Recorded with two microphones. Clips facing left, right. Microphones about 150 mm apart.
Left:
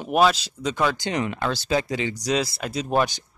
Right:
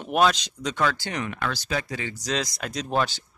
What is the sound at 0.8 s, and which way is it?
Speech, 15° left (ahead or behind).